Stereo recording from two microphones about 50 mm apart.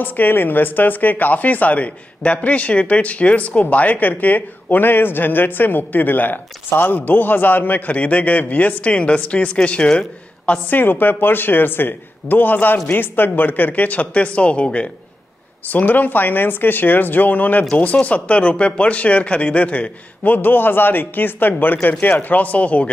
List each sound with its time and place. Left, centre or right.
0.0 s speech: left
10.7 s speech: left
15.7 s speech: left